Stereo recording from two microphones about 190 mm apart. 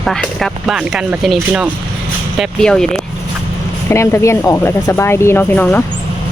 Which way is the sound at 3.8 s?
15° left (ahead or behind).